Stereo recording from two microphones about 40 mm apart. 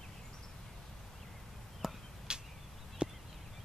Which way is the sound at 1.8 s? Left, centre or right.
Centre.